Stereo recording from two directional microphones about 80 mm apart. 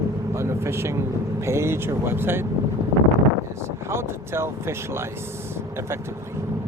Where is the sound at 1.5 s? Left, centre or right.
Right.